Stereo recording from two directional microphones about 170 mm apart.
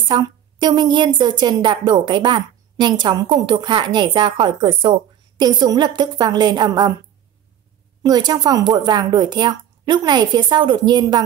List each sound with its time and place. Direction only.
0.1 s a woman's voice: 25° right (ahead or behind)
8.0 s a woman's voice: 25° right (ahead or behind)